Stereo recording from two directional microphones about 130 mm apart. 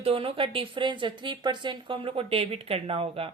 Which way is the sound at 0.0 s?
45° right (ahead or behind).